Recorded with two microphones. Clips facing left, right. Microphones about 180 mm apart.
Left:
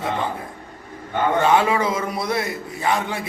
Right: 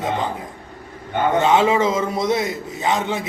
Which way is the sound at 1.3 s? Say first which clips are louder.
Right 2 dB; 20° right (ahead or behind).